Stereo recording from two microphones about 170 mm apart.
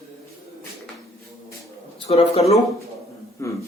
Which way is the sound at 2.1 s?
35° left (ahead or behind).